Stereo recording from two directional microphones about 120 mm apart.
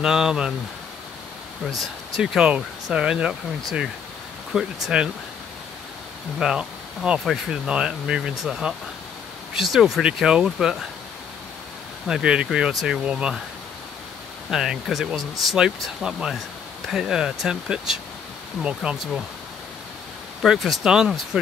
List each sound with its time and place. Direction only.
0.0 s speech: 5° right (ahead or behind)
1.8 s speech: 5° right (ahead or behind)
4.8 s speech: 5° right (ahead or behind)
6.4 s speech: 5° right (ahead or behind)
12.1 s speech: 5° right (ahead or behind)
14.5 s speech: 5° right (ahead or behind)
20.4 s speech: centre (ahead or behind)